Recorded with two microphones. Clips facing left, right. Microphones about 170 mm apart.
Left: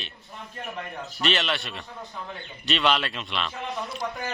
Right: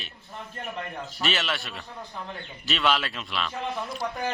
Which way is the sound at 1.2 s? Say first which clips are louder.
Left 3 dB; centre (ahead or behind).